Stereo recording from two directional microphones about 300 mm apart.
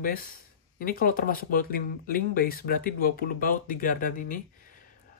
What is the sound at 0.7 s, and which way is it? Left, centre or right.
Speech, left.